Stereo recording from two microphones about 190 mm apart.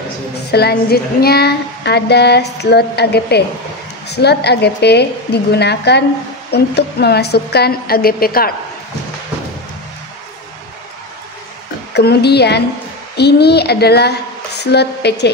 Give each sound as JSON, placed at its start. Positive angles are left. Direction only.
{"t": 0.5, "sound": "child singing", "side_deg": 55}
{"t": 11.9, "sound": "child singing", "side_deg": 60}